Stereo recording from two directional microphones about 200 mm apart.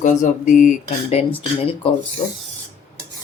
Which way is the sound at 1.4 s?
25° left (ahead or behind).